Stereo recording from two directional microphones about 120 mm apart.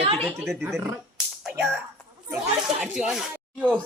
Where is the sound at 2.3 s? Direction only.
5° right (ahead or behind).